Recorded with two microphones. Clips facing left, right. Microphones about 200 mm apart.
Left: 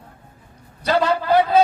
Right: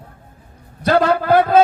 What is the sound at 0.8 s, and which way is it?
Speech, 55° right (ahead or behind).